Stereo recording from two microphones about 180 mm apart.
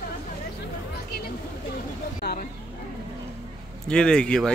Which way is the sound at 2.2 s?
60° left (ahead or behind).